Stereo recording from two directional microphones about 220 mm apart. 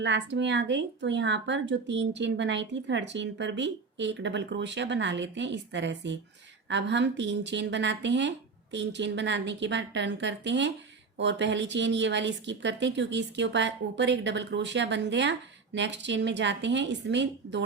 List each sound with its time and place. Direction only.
0.0 s a woman's voice: 55° right (ahead or behind)